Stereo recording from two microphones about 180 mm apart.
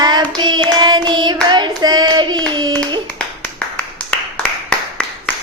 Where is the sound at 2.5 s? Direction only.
25° right (ahead or behind).